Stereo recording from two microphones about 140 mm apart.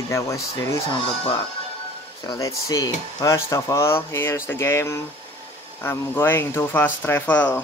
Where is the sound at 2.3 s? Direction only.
25° left (ahead or behind).